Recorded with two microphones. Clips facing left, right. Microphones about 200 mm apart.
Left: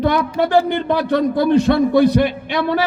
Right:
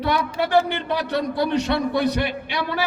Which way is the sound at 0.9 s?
50° left (ahead or behind).